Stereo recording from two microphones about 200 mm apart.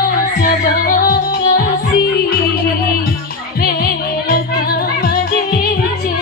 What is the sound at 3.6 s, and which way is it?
Music, 50° left (ahead or behind).